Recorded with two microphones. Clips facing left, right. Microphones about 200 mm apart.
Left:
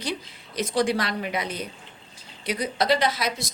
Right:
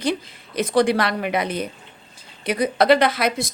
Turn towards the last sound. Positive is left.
turn(degrees=-55)  # may be behind; listen again after turning